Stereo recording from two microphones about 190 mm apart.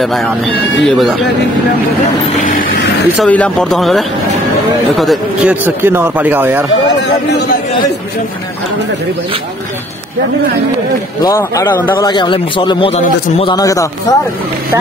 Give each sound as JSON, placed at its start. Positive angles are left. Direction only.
{"t": 0.0, "sound": "speech", "side_deg": 0}
{"t": 2.4, "sound": "a sound", "side_deg": 45}
{"t": 3.2, "sound": "speech", "side_deg": 5}
{"t": 7.0, "sound": "speech", "side_deg": 65}
{"t": 11.2, "sound": "a man's voice", "side_deg": 20}
{"t": 12.1, "sound": "a man's voice", "side_deg": 25}